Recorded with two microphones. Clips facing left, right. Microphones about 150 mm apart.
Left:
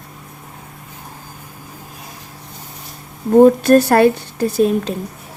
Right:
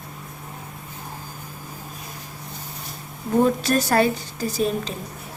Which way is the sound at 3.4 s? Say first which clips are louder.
Left 11 dB; 55° left (ahead or behind).